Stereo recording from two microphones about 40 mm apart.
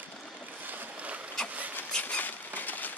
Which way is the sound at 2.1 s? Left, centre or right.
Left.